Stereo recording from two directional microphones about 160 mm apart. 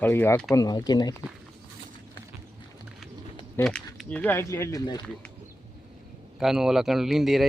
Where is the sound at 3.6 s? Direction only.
5° left (ahead or behind); by 5.0 s 25° left (ahead or behind).